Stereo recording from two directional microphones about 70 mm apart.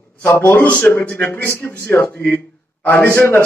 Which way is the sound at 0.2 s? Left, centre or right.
Left.